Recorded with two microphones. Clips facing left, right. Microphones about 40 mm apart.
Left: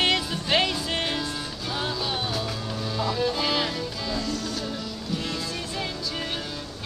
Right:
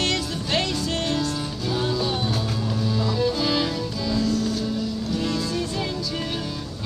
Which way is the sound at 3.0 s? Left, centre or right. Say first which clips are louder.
Even; centre.